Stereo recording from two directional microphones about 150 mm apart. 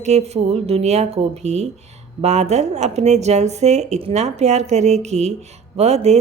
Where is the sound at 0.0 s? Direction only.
45° right (ahead or behind).